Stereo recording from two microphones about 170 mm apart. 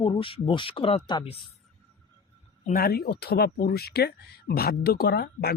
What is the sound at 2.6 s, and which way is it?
Speech, 60° left (ahead or behind).